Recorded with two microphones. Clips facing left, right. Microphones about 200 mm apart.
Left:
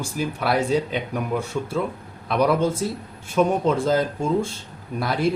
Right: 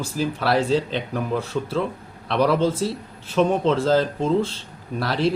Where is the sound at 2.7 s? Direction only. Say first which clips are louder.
Right 2 dB; 30° right (ahead or behind).